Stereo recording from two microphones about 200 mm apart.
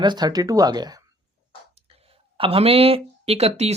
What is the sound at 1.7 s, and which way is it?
Speech, 30° right (ahead or behind).